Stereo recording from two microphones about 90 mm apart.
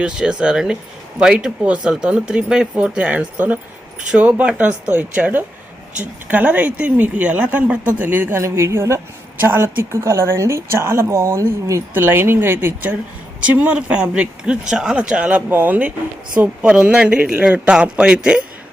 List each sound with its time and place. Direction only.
0.0 s a woman's voice: 10° right (ahead or behind)